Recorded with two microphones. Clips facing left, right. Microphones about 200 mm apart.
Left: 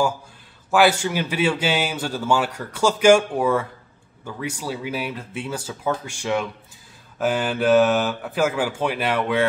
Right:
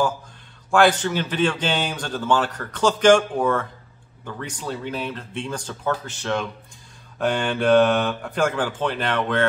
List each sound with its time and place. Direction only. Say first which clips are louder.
0.7 s speech: even; 5° left (ahead or behind)